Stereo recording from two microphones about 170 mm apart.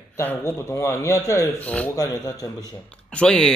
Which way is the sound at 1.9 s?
20° left (ahead or behind).